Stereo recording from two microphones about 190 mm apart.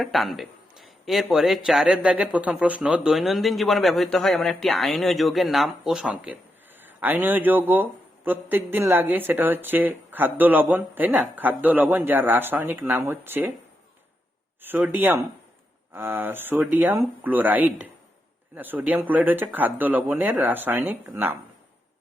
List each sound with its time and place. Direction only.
0.0 s a man's voice: centre (ahead or behind)
14.6 s a man's voice: 10° right (ahead or behind)